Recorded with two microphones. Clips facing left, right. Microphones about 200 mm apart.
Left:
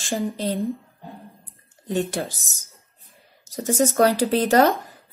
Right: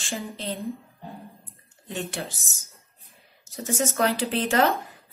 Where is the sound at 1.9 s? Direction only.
40° left (ahead or behind).